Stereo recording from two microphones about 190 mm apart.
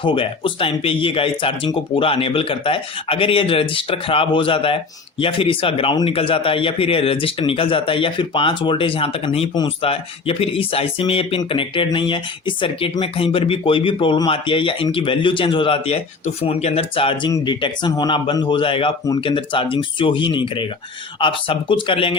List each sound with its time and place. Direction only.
0.0 s a man's voice: 25° left (ahead or behind)